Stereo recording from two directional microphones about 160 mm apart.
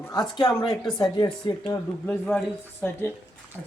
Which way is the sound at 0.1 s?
25° left (ahead or behind).